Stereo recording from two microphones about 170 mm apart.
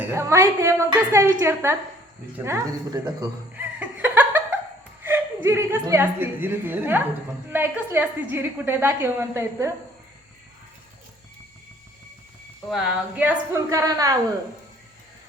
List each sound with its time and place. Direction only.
0.0 s a woman's voice: 15° right (ahead or behind)
3.5 s laughter: 10° right (ahead or behind)
5.0 s a woman's voice: 15° right (ahead or behind)
12.7 s a woman's voice: 5° right (ahead or behind)